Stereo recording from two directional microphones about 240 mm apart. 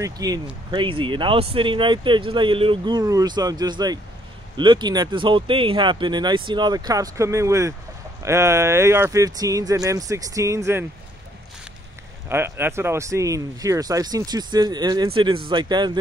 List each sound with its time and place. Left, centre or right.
0.0 s speech: centre
12.3 s speech: centre